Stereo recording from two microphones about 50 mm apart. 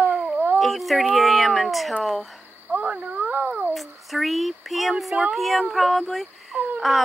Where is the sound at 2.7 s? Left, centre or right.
Right.